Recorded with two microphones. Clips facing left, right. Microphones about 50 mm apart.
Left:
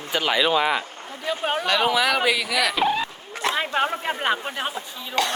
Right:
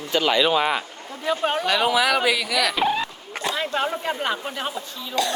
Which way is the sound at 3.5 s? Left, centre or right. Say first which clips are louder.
Left 1 dB; left.